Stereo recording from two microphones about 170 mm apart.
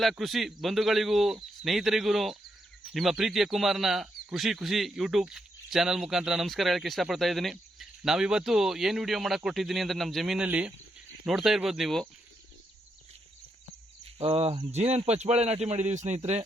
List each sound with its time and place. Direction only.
0.0 s speech: centre (ahead or behind)
14.2 s speech: 35° right (ahead or behind)